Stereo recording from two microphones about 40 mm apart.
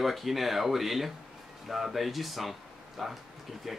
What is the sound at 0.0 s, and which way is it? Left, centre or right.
Speech, centre.